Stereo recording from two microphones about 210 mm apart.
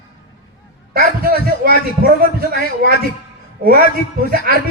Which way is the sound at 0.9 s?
45° right (ahead or behind).